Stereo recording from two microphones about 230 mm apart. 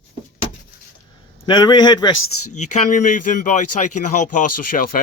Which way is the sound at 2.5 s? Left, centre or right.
Left.